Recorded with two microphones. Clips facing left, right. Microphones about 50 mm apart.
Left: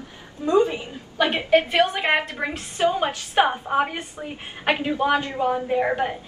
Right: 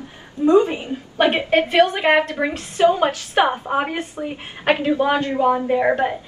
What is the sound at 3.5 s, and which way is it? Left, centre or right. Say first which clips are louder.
Speech: right 1 dB; centre.